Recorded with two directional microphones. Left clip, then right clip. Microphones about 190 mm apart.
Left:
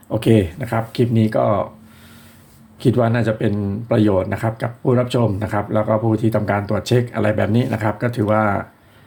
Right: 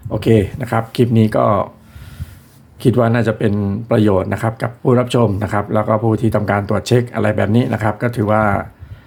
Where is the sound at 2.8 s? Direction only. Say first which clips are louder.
Right 3 dB; 15° right (ahead or behind).